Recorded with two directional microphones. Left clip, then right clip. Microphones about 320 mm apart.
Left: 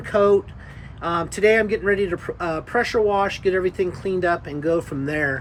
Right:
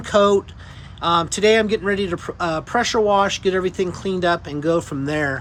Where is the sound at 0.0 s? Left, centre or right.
Centre.